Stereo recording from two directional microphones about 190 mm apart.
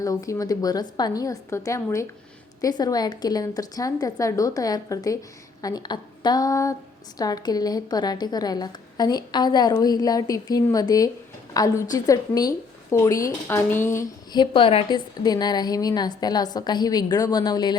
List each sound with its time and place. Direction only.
0.0 s a woman's voice: 15° left (ahead or behind)
14.5 s a woman's voice: 30° left (ahead or behind)